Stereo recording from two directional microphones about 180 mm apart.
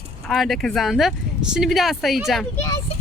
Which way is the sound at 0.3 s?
Centre (ahead or behind).